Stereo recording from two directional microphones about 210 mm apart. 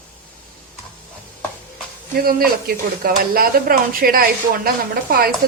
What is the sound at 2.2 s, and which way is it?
Speech, 45° right (ahead or behind).